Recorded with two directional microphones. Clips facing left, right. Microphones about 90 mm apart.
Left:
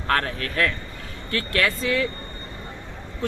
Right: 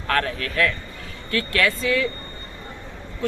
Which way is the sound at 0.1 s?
35° left (ahead or behind).